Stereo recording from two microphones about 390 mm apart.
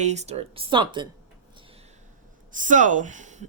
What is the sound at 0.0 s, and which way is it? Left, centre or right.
Speech, centre.